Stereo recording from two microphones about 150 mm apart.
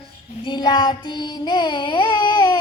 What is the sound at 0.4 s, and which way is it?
Child singing, 30° left (ahead or behind).